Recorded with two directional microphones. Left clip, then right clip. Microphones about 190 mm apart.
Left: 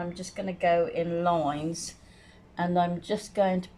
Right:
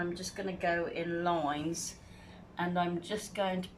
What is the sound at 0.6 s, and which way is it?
Speech, 30° left (ahead or behind).